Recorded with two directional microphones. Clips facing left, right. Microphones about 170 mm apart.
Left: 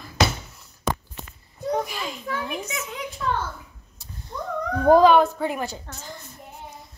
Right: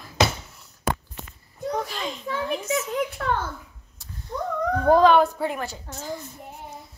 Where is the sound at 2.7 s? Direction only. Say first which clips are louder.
Right 8 dB; 45° right (ahead or behind).